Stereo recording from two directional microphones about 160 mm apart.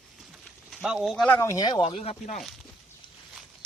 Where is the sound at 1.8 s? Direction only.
40° left (ahead or behind).